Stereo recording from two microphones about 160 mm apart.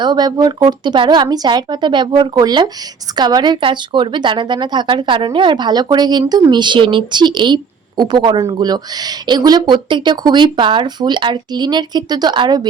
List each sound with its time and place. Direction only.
0.0 s speech: 25° right (ahead or behind)